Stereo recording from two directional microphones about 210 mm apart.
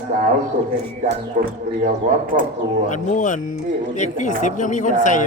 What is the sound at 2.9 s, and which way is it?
A woman's voice, 35° left (ahead or behind).